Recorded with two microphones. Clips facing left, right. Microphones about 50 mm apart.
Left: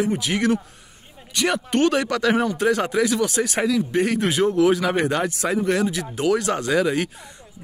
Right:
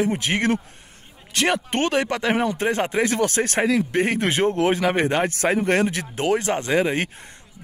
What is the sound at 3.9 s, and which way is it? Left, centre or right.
Speech, right.